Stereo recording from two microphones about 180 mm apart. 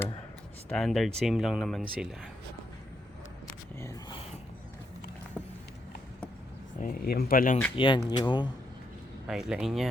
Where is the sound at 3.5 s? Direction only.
15° left (ahead or behind).